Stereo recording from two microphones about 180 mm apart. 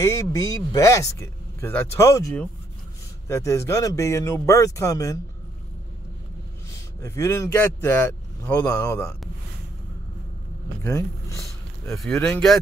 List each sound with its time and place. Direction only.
0.0 s speech: 15° left (ahead or behind)
7.0 s speech: 15° left (ahead or behind)
10.8 s a sound: 15° left (ahead or behind)
11.9 s speech: centre (ahead or behind)